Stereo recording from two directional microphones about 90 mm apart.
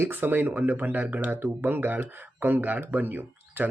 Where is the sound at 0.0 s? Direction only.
25° right (ahead or behind).